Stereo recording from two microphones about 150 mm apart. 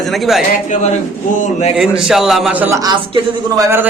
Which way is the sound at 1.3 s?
55° left (ahead or behind).